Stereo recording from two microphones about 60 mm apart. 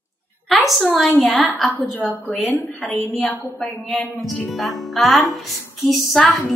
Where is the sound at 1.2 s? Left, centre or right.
Left.